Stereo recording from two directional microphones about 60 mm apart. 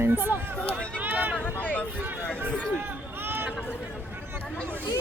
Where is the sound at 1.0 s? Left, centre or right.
Right.